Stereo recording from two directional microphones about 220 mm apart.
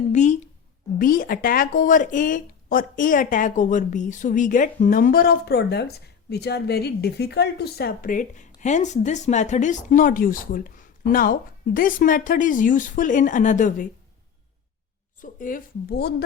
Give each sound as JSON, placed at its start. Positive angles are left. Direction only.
{"t": 0.1, "sound": "a sound", "side_deg": 35}
{"t": 0.9, "sound": "speech", "side_deg": 40}
{"t": 15.2, "sound": "speech", "side_deg": 40}